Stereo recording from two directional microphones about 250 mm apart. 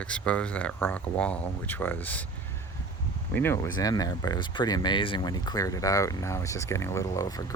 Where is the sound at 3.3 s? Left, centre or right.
Centre.